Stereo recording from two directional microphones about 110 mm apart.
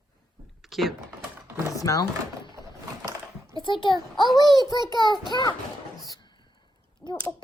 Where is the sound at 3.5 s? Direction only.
45° left (ahead or behind).